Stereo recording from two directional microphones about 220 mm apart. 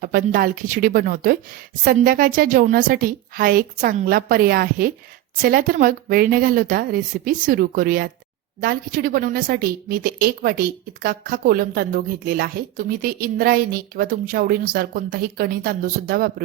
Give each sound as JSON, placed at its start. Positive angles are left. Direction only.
{"t": 0.0, "sound": "a woman's voice", "side_deg": -40}